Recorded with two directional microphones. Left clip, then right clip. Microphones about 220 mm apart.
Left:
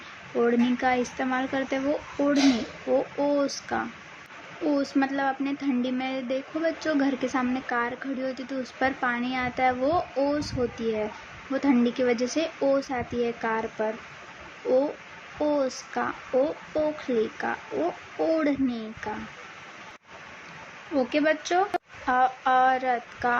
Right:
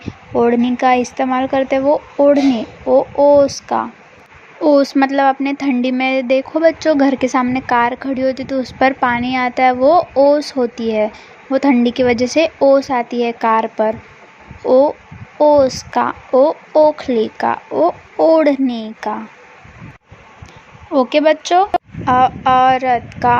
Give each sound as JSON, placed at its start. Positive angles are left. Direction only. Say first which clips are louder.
{"t": 0.3, "sound": "speech", "louder": "right 10 dB", "side_deg": -30}
{"t": 20.9, "sound": "speech", "louder": "right 12 dB", "side_deg": -30}